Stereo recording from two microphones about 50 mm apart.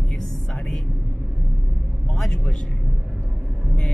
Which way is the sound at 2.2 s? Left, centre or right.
Centre.